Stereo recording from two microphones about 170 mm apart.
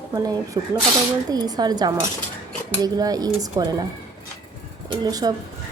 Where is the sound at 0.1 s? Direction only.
20° right (ahead or behind).